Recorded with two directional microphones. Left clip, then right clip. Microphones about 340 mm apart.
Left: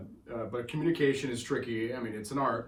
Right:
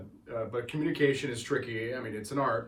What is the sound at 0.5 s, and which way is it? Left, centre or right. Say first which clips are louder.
Speech: left 3 dB; centre.